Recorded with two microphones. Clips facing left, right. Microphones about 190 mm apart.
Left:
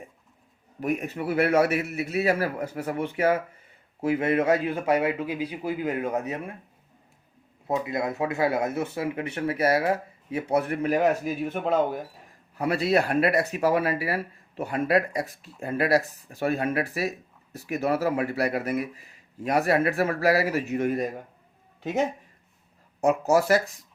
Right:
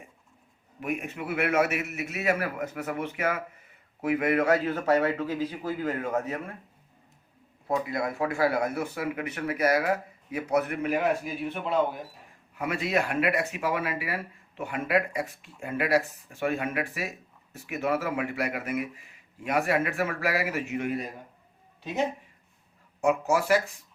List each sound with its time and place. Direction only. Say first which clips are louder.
0.8 s a man's voice: left 4 dB; 40° left (ahead or behind); by 6.5 s 15° left (ahead or behind)
7.7 s speech: left 2 dB; 20° left (ahead or behind); by 21.1 s 45° left (ahead or behind)
23.0 s speech: left 3 dB; 40° left (ahead or behind)